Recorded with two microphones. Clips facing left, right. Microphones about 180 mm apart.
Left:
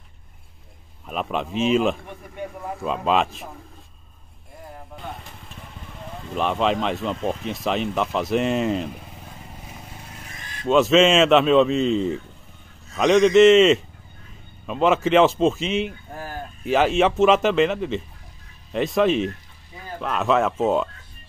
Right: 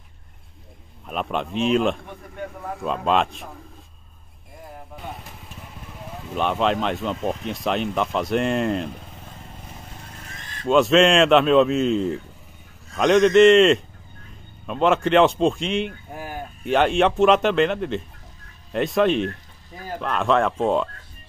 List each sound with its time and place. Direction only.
1.0 s a man's voice: centre (ahead or behind)
4.7 s vehicle: centre (ahead or behind)
12.9 s a man's voice: centre (ahead or behind)
16.1 s a sound: 15° right (ahead or behind)
16.6 s a man's voice: centre (ahead or behind)